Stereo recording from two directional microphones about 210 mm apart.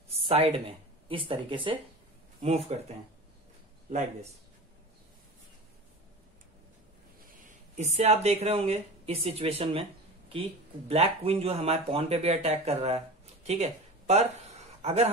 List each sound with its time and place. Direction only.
0.3 s speech: 25° right (ahead or behind)
7.2 s speech: 40° right (ahead or behind)
10.9 s speech: 30° right (ahead or behind)